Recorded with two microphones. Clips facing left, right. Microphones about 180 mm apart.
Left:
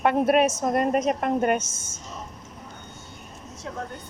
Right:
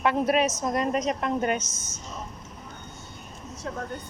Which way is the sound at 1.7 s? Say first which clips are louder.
Right 1 dB; 25° left (ahead or behind).